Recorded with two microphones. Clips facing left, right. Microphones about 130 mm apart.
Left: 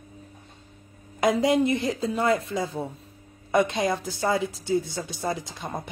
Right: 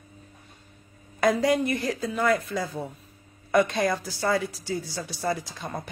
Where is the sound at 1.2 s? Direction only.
25° left (ahead or behind).